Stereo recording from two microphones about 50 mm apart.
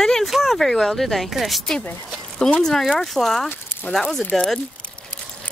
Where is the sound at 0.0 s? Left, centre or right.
Centre.